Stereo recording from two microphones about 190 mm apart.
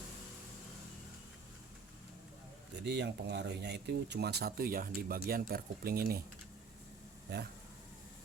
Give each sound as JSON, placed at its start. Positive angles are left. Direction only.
{"t": 2.8, "sound": "speech", "side_deg": -65}
{"t": 7.3, "sound": "speech", "side_deg": -60}